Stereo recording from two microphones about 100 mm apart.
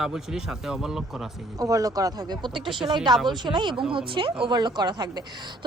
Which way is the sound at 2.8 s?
45° right (ahead or behind).